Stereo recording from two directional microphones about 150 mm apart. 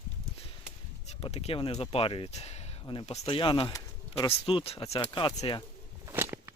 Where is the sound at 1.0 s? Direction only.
45° left (ahead or behind).